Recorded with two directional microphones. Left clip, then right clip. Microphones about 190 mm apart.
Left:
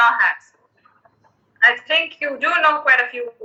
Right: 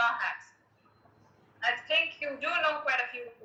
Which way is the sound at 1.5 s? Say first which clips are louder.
Left 13 dB; 45° left (ahead or behind).